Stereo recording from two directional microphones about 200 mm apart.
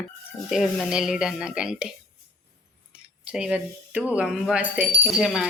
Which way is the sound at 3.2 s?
5° right (ahead or behind).